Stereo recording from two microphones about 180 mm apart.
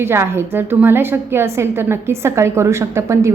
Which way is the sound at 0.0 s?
15° right (ahead or behind).